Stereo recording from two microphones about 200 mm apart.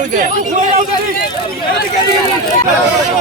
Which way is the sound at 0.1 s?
40° right (ahead or behind).